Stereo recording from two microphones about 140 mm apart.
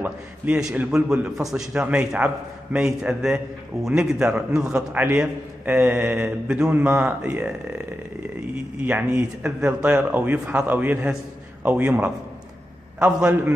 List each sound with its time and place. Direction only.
0.0 s a man's voice: 10° right (ahead or behind)